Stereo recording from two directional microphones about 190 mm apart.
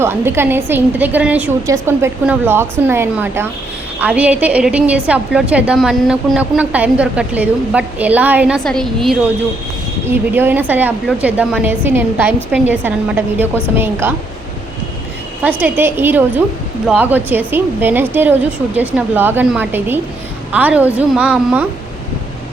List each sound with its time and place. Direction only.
0.0 s a woman's voice: 10° right (ahead or behind)
8.6 s a woman's voice: centre (ahead or behind)
10.1 s a woman's voice: 10° right (ahead or behind)
15.4 s a woman's voice: 10° right (ahead or behind)